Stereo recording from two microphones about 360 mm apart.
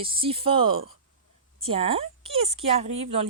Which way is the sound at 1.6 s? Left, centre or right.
Centre.